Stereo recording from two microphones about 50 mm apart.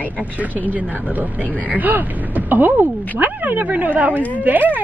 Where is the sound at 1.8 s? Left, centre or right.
Right.